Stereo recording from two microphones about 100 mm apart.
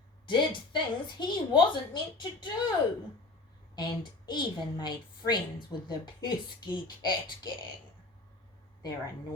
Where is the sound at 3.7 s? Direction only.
50° left (ahead or behind).